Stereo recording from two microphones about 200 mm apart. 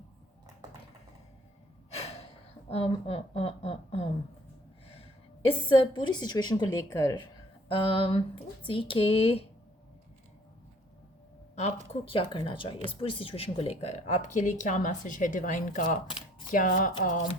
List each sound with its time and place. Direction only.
1.9 s gasp: 30° left (ahead or behind)
2.6 s a woman's voice: 30° left (ahead or behind)
5.5 s a woman's voice: 25° left (ahead or behind)
11.5 s speech: 30° left (ahead or behind)